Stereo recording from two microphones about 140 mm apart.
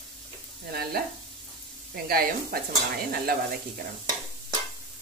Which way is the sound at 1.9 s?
90° right.